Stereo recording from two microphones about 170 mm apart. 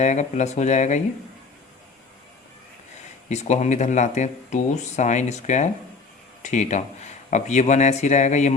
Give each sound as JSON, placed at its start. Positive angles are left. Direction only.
{"t": 0.0, "sound": "speech", "side_deg": 45}
{"t": 3.2, "sound": "speech", "side_deg": 40}